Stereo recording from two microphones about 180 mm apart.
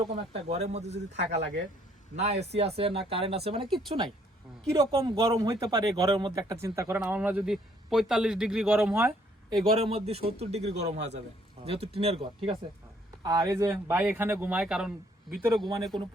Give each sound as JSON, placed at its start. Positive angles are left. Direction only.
{"t": 0.0, "sound": "speech", "side_deg": -30}
{"t": 9.0, "sound": "a sound", "side_deg": -15}
{"t": 9.7, "sound": "a man's voice", "side_deg": -30}
{"t": 15.9, "sound": "speech", "side_deg": -25}